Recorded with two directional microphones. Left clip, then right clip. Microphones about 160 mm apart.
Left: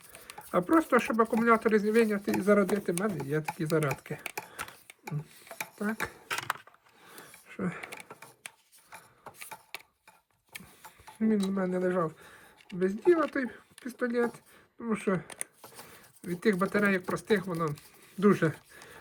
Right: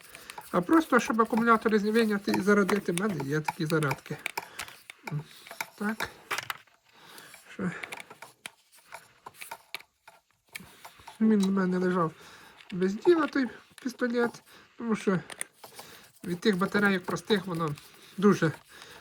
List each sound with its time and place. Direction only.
0.1 s speech: 5° right (ahead or behind)
7.1 s a sound: 5° right (ahead or behind)
11.2 s speech: 5° right (ahead or behind)